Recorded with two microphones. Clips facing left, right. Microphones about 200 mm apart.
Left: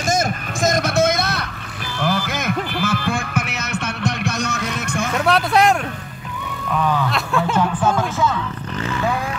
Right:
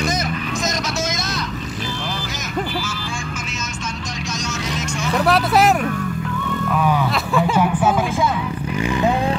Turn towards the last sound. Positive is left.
turn(degrees=0)  # may be behind; listen again after turning